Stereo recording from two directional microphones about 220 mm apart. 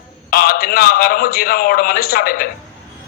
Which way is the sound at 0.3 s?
45° left (ahead or behind).